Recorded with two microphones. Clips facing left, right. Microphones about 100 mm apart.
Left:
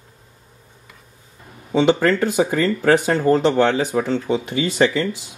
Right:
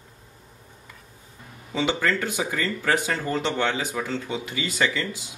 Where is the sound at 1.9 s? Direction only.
40° left (ahead or behind).